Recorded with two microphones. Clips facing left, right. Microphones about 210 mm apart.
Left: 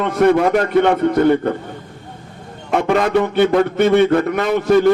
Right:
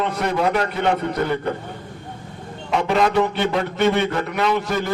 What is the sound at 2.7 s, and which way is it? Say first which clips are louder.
A man's voice: left 3 dB; 55° left (ahead or behind).